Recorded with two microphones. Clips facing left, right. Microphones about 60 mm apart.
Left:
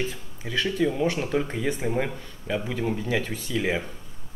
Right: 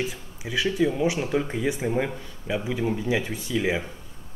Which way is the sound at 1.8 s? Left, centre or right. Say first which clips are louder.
Right 1 dB; centre.